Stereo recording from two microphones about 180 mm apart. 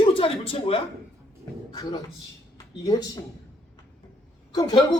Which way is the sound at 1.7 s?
20° left (ahead or behind).